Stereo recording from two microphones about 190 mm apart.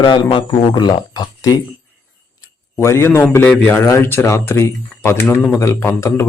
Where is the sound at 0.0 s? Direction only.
25° left (ahead or behind).